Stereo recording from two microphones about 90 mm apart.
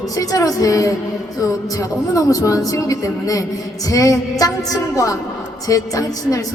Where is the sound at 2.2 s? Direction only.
40° left (ahead or behind).